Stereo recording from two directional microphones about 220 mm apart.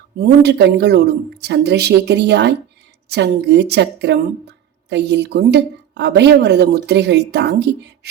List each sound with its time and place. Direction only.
0.4 s a woman's voice: 50° right (ahead or behind)